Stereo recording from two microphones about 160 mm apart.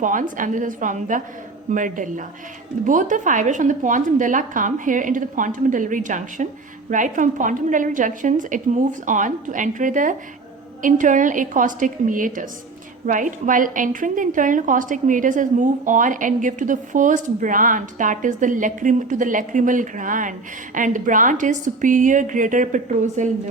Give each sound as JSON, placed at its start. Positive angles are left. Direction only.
{"t": 0.0, "sound": "a woman's voice", "side_deg": -55}